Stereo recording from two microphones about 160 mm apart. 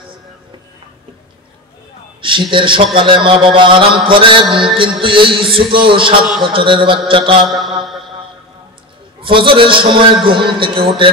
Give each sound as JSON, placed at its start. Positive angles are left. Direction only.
{"t": 2.2, "sound": "a man's voice", "side_deg": -30}
{"t": 7.4, "sound": "a sound", "side_deg": 0}
{"t": 9.2, "sound": "a man's voice", "side_deg": -30}